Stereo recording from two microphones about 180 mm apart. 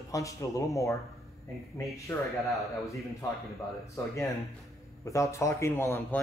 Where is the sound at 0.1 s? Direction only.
15° left (ahead or behind).